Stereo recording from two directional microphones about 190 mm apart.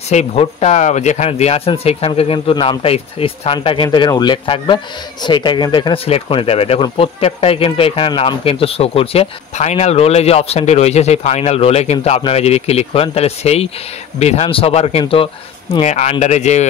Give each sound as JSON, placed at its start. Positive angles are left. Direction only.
{"t": 0.1, "sound": "speech", "side_deg": 35}